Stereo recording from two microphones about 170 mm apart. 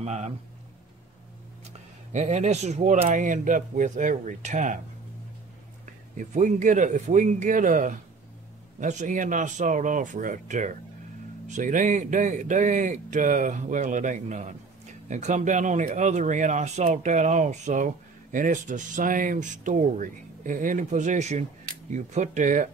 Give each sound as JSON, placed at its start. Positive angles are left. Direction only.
{"t": 0.0, "sound": "speech", "side_deg": -40}
{"t": 2.1, "sound": "speech", "side_deg": -40}
{"t": 5.9, "sound": "speech", "side_deg": -45}